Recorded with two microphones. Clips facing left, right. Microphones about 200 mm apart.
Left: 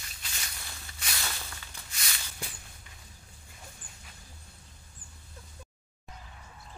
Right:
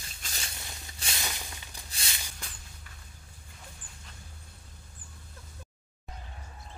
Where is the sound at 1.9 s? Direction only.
25° right (ahead or behind).